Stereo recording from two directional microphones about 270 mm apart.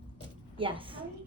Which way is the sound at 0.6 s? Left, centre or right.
Centre.